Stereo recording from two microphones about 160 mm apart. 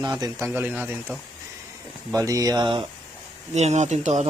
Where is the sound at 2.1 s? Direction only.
20° right (ahead or behind).